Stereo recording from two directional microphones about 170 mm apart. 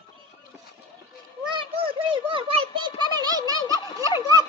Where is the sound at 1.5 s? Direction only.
30° right (ahead or behind).